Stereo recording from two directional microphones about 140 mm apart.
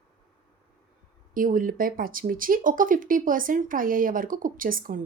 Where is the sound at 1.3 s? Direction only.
75° right (ahead or behind).